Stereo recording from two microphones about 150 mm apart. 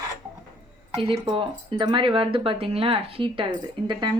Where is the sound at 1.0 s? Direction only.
35° right (ahead or behind).